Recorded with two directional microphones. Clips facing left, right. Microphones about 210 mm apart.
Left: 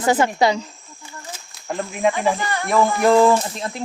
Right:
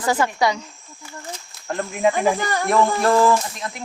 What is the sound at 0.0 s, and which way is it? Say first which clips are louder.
Speech: left 3 dB; 20° left (ahead or behind).